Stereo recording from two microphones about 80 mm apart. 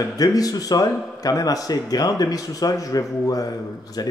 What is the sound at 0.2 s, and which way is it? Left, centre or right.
A man's voice, left.